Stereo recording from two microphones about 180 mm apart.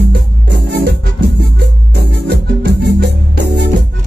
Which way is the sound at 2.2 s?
70° right (ahead or behind).